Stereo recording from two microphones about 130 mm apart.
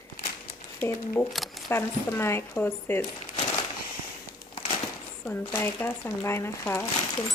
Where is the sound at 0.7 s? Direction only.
15° left (ahead or behind).